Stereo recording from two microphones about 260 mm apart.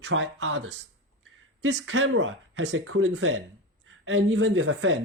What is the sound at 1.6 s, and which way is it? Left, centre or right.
Speech, right.